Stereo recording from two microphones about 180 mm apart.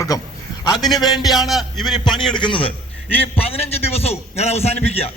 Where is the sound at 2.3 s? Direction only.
25° left (ahead or behind).